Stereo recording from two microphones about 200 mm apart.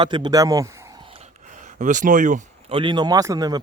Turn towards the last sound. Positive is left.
turn(degrees=-20)  # may be behind; listen again after turning